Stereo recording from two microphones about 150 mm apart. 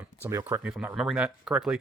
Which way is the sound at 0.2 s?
15° right (ahead or behind).